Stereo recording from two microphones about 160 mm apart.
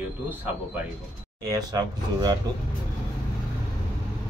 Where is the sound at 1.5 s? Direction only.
25° right (ahead or behind).